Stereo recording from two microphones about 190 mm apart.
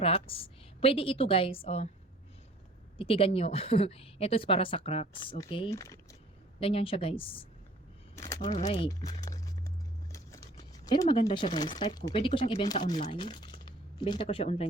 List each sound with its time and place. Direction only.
0.0 s a woman's voice: 30° left (ahead or behind)
3.0 s a woman's voice: 30° left (ahead or behind)
5.7 s speech: 15° left (ahead or behind)
6.6 s a woman's voice: 30° left (ahead or behind)
8.1 s a sound: 15° left (ahead or behind)
8.4 s a woman's voice: 40° left (ahead or behind)
8.7 s speech: 20° left (ahead or behind)